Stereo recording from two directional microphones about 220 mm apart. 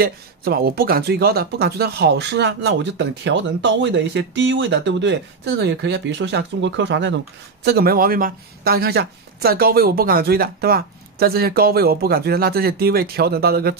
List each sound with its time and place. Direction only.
0.0 s speech: 45° right (ahead or behind)
7.6 s speech: 45° right (ahead or behind)